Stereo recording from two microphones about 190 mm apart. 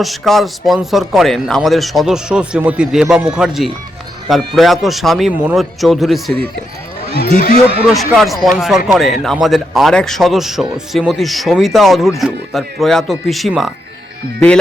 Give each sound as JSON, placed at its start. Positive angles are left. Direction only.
{"t": 0.0, "sound": "speech", "side_deg": 0}
{"t": 7.2, "sound": "a sound", "side_deg": 50}
{"t": 7.9, "sound": "speech", "side_deg": 0}